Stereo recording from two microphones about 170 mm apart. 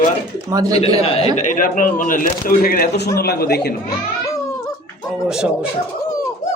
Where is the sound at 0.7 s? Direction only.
35° left (ahead or behind).